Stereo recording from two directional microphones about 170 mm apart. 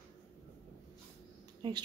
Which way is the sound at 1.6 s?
25° right (ahead or behind).